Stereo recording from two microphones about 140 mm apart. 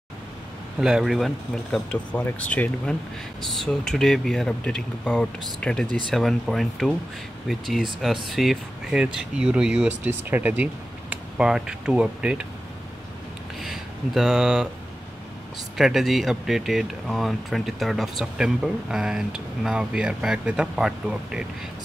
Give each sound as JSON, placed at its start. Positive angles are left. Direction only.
{"t": 0.7, "sound": "speech", "side_deg": -5}
{"t": 13.6, "sound": "a sound", "side_deg": 0}
{"t": 15.8, "sound": "speech", "side_deg": 0}